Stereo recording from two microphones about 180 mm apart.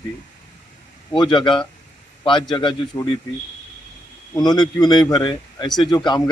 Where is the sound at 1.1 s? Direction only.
25° left (ahead or behind).